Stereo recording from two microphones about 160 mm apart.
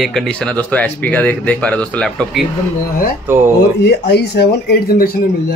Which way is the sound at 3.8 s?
90° left.